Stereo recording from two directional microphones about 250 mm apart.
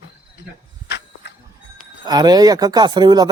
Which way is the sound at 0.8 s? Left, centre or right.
Left.